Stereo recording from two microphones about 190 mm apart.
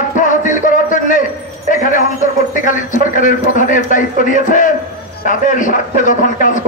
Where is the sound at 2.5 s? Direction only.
45° left (ahead or behind).